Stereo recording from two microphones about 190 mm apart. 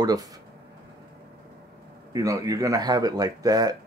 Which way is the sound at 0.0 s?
20° right (ahead or behind).